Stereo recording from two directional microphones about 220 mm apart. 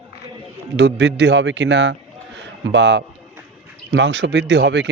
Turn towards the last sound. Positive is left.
turn(degrees=-50)  # may be behind; listen again after turning